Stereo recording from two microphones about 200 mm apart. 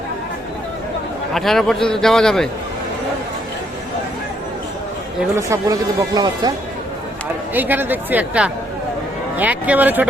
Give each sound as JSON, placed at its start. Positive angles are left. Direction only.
{"t": 1.3, "sound": "a man's voice", "side_deg": 0}
{"t": 5.4, "sound": "speech", "side_deg": -15}
{"t": 7.5, "sound": "speech", "side_deg": -10}